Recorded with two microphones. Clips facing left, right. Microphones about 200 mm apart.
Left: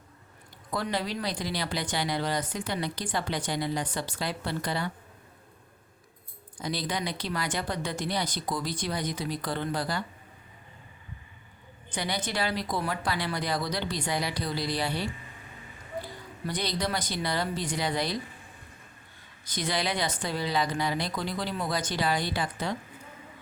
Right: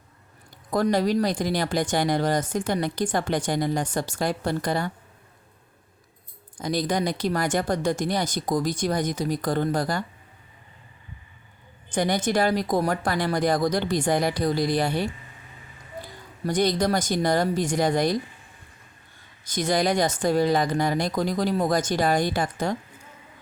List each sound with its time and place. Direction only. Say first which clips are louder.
0.7 s speech: right 9 dB; 45° right (ahead or behind)
6.6 s speech: right 7 dB; 45° right (ahead or behind)
11.9 s speech: right 9 dB; 45° right (ahead or behind)
16.5 s speech: right 9 dB; 45° right (ahead or behind)
19.5 s speech: right 8 dB; 45° right (ahead or behind)